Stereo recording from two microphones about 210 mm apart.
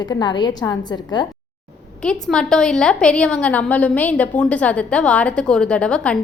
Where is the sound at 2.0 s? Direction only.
5° left (ahead or behind).